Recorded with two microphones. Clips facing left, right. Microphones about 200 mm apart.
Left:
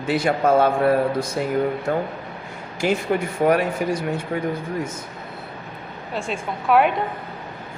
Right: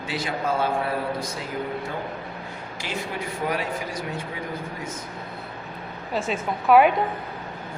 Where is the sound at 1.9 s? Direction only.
55° left (ahead or behind).